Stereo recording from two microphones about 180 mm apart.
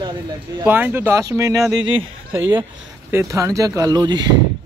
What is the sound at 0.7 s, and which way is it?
Speech, 10° right (ahead or behind).